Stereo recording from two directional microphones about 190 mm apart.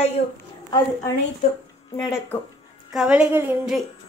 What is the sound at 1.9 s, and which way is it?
Speech, 15° left (ahead or behind).